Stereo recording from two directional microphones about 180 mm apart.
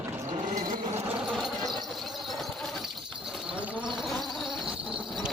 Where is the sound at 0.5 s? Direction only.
50° right (ahead or behind).